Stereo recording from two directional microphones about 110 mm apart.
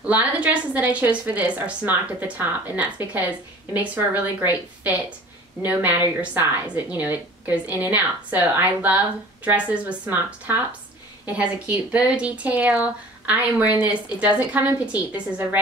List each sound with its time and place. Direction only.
0.0 s a woman's voice: 15° right (ahead or behind)